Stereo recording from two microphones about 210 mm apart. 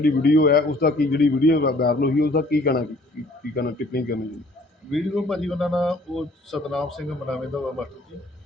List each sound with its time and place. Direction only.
0.0 s a man's voice: 45° left (ahead or behind)
4.9 s speech: centre (ahead or behind)